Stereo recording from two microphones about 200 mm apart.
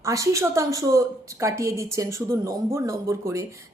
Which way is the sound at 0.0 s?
15° right (ahead or behind).